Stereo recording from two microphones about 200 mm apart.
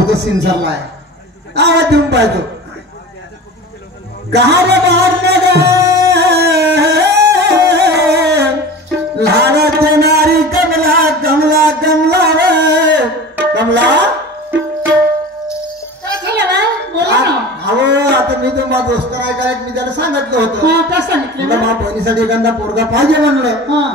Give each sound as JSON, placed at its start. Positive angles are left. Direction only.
{"t": 0.0, "sound": "a man's voice", "side_deg": -55}
{"t": 4.3, "sound": "a man's voice", "side_deg": -55}
{"t": 6.1, "sound": "music", "side_deg": -55}
{"t": 9.8, "sound": "a sound", "side_deg": -55}
{"t": 16.3, "sound": "a sound", "side_deg": -55}
{"t": 21.6, "sound": "a man's voice", "side_deg": -60}